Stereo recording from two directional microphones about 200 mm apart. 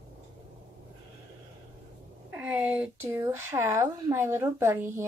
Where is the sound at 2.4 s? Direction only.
10° right (ahead or behind).